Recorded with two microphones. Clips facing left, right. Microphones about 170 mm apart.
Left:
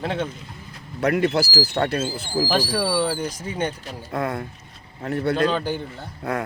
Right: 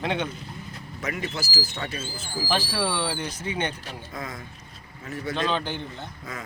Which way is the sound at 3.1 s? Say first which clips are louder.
Left 4 dB; 10° left (ahead or behind).